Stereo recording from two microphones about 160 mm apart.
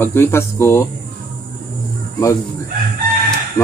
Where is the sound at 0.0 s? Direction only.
15° left (ahead or behind).